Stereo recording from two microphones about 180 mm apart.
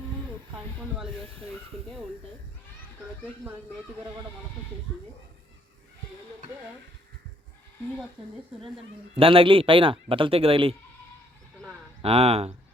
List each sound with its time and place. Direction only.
9.1 s speech: 30° right (ahead or behind)
12.0 s speech: 35° right (ahead or behind)